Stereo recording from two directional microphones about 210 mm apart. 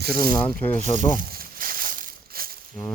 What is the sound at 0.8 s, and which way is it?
Speech, 35° right (ahead or behind).